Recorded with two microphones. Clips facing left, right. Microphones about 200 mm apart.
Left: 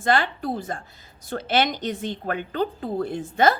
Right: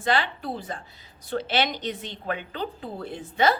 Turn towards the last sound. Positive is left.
turn(degrees=45)  # may be behind; listen again after turning